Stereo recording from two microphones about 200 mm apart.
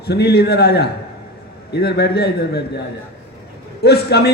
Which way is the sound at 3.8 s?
55° left (ahead or behind).